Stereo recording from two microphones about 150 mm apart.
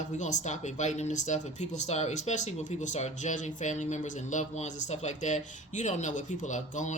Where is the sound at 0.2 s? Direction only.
55° left (ahead or behind).